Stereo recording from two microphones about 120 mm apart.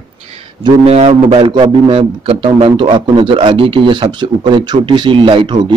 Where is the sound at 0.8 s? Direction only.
60° right (ahead or behind).